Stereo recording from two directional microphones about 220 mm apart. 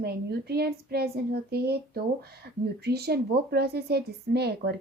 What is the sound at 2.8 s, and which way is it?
A woman's voice, 45° right (ahead or behind).